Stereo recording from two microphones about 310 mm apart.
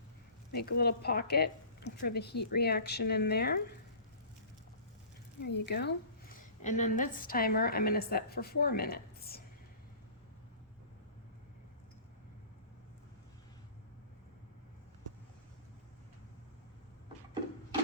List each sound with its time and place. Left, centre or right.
0.5 s speech: left
5.5 s a woman's voice: left